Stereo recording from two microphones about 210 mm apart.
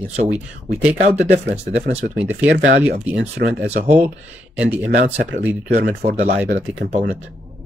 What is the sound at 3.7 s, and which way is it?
Speech, 35° right (ahead or behind).